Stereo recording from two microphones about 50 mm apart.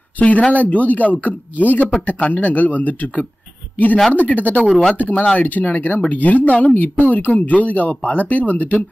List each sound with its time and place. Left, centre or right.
0.5 s speech: left